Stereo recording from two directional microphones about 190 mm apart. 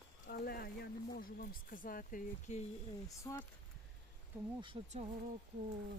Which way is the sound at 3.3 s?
20° left (ahead or behind).